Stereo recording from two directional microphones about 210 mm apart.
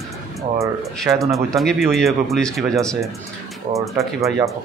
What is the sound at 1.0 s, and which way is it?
Speech, centre (ahead or behind).